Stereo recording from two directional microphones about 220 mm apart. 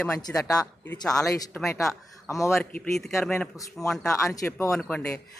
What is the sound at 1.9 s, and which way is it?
Speech, 15° left (ahead or behind).